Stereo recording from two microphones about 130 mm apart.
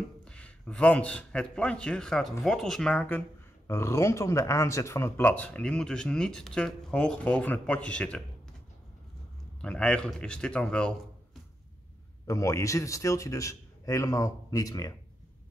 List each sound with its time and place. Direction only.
0.2 s a man's voice: 5° left (ahead or behind)
9.6 s a man's voice: 10° left (ahead or behind)
12.3 s a man's voice: 25° left (ahead or behind)